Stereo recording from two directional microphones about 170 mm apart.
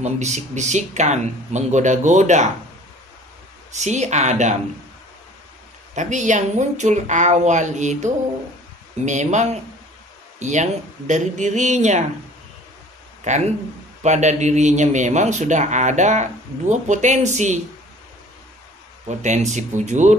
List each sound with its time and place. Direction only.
0.0 s a man's voice: 45° right (ahead or behind)
3.7 s a man's voice: 45° right (ahead or behind)
5.9 s a man's voice: 45° right (ahead or behind)
13.3 s a man's voice: 45° right (ahead or behind)
19.0 s a man's voice: 45° right (ahead or behind)